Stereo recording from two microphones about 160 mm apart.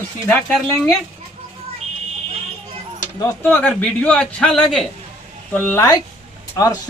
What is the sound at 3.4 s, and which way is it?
A man's voice, 10° left (ahead or behind).